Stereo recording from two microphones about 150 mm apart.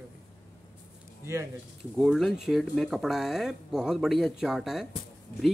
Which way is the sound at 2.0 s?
Centre (ahead or behind).